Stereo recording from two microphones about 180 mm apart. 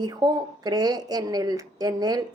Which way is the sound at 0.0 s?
25° right (ahead or behind).